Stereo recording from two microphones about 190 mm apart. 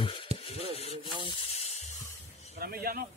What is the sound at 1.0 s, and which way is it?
Sanding, 25° right (ahead or behind).